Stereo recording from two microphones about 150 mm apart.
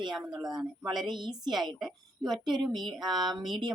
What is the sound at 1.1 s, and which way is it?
Speech, 30° right (ahead or behind).